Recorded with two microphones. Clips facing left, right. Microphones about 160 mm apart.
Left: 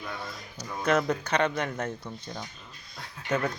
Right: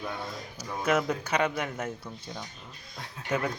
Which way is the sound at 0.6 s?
10° right (ahead or behind).